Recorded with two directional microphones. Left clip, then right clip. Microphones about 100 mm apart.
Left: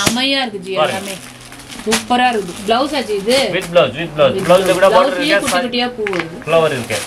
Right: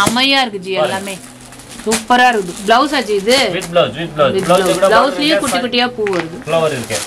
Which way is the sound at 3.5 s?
5° right (ahead or behind).